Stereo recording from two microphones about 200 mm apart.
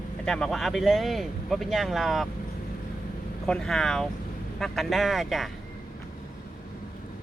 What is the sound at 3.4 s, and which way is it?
Speech, 5° left (ahead or behind).